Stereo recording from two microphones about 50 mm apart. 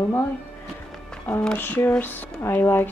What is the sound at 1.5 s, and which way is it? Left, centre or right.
Speech, left.